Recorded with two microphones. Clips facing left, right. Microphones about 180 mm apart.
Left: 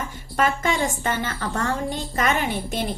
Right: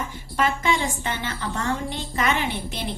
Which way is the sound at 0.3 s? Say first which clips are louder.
Left 1 dB; 45° left (ahead or behind).